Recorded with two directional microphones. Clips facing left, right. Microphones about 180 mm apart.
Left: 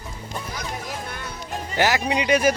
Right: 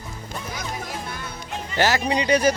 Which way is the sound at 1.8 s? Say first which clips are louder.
Even; 15° left (ahead or behind).